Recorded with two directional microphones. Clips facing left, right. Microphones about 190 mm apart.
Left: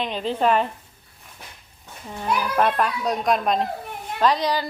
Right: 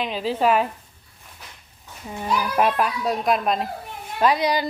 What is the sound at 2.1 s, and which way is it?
A woman's voice, 10° right (ahead or behind).